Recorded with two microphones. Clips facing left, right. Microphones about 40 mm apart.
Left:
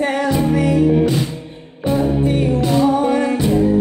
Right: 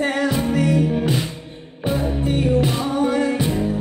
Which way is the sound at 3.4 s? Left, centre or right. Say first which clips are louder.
Left 6 dB; centre.